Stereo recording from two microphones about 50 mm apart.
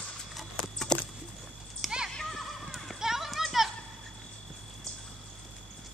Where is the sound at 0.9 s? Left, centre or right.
Centre.